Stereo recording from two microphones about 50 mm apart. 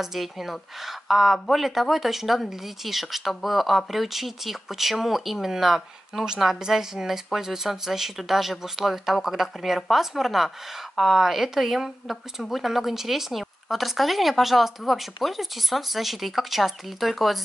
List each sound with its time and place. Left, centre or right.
0.0 s speech: centre